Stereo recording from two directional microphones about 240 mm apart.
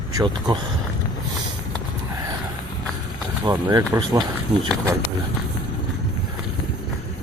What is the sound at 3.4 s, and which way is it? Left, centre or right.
Speech, centre.